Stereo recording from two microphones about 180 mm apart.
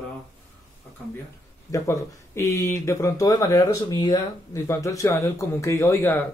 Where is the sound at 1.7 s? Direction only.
15° left (ahead or behind).